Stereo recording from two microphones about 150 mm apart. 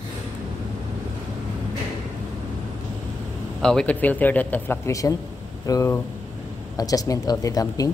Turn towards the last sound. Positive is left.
turn(degrees=25)  # may be behind; listen again after turning